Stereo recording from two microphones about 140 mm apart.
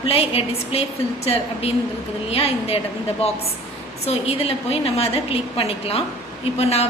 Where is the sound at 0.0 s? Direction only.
45° left (ahead or behind).